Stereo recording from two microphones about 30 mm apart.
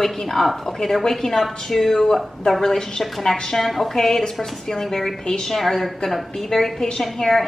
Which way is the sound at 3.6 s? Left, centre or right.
Centre.